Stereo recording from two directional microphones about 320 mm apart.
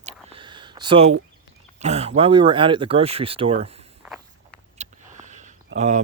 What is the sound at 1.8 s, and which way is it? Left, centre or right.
Speech, centre.